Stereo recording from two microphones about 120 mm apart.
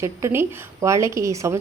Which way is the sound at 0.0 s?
25° right (ahead or behind).